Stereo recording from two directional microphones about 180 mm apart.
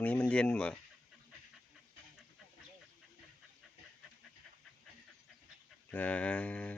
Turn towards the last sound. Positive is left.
turn(degrees=5)  # may be behind; listen again after turning